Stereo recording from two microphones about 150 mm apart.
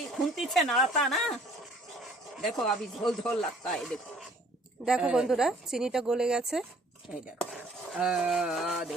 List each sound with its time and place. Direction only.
0.2 s speech: centre (ahead or behind)
2.4 s speech: centre (ahead or behind)
7.5 s a sound: 5° right (ahead or behind)